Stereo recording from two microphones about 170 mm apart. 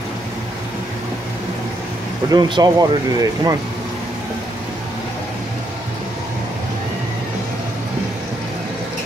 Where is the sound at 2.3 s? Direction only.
25° right (ahead or behind).